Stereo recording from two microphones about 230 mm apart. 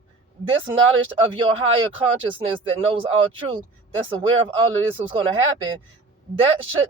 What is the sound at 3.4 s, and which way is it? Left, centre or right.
A man's voice, right.